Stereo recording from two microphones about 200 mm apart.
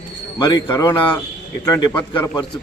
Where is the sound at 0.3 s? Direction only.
20° left (ahead or behind).